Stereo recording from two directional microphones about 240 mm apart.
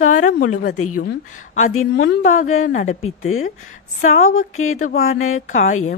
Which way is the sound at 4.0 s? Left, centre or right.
Left.